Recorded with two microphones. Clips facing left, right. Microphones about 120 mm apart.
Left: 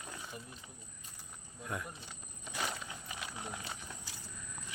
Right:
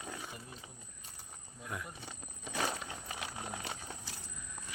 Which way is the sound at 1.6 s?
Centre (ahead or behind).